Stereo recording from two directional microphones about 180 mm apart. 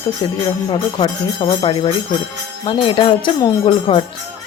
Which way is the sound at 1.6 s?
25° left (ahead or behind).